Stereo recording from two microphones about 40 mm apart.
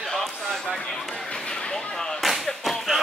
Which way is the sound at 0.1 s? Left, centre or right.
Centre.